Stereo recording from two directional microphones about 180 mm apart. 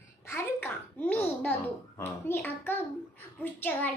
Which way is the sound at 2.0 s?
10° left (ahead or behind).